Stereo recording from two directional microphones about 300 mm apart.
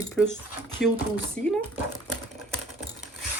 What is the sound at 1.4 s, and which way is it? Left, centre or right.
Speech, right.